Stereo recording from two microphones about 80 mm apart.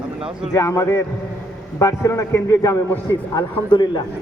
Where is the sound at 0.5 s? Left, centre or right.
Left.